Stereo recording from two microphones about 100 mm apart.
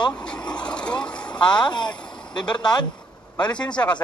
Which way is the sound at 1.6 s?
50° left (ahead or behind).